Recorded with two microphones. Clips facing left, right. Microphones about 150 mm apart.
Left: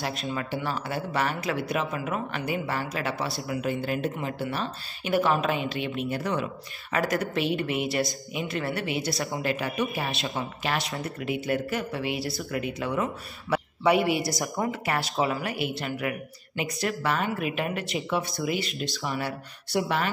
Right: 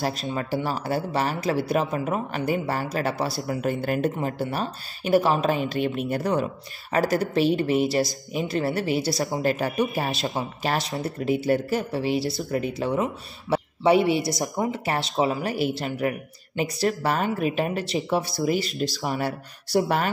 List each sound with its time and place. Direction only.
0.3 s speech: 30° right (ahead or behind)
15.4 s speech: 35° right (ahead or behind)